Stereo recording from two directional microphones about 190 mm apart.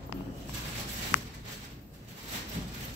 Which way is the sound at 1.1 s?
30° left (ahead or behind).